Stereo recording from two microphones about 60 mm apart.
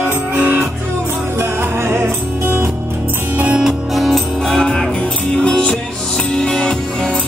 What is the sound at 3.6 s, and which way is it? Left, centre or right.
Music, centre.